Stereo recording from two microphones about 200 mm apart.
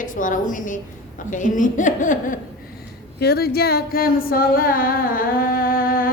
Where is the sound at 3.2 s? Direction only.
50° left (ahead or behind).